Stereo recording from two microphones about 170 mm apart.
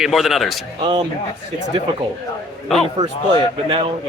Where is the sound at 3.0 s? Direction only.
40° right (ahead or behind).